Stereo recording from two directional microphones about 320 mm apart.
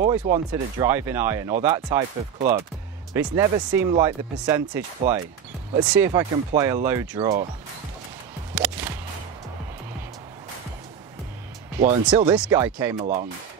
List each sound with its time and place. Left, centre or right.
0.2 s speech: centre
3.1 s speech: centre
5.9 s speech: centre
8.5 s music: centre
11.8 s speech: centre
13.0 s speech: centre